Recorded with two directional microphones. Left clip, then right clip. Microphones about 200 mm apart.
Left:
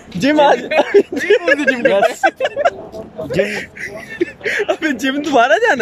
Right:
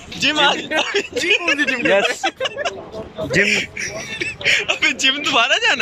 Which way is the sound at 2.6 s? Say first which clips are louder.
Left 12 dB; 20° left (ahead or behind).